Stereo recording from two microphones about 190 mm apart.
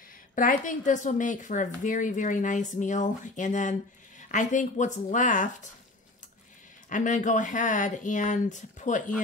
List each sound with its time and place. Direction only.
0.4 s a woman's voice: 45° left (ahead or behind)
6.9 s a woman's voice: 40° left (ahead or behind)